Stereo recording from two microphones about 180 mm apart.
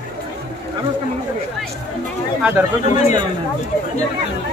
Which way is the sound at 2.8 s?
40° left (ahead or behind).